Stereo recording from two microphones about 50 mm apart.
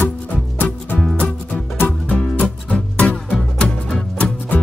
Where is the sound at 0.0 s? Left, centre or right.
Left.